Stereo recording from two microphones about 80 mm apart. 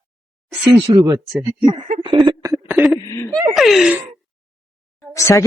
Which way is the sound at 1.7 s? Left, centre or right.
Right.